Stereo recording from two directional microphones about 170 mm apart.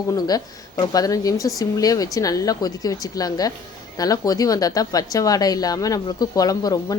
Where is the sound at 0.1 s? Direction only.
20° left (ahead or behind).